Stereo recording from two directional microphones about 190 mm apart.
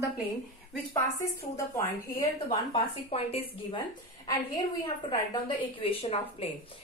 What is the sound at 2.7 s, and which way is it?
Speech, 30° left (ahead or behind).